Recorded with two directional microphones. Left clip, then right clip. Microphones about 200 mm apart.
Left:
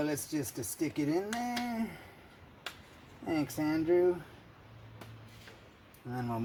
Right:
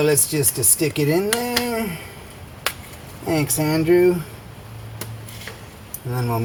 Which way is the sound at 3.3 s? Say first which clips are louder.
Right 12 dB; 30° left (ahead or behind).